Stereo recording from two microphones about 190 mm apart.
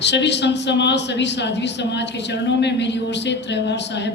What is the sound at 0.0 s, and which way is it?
A man's voice, 65° left (ahead or behind).